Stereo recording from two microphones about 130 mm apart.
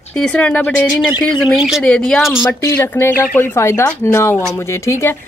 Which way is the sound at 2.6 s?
20° left (ahead or behind).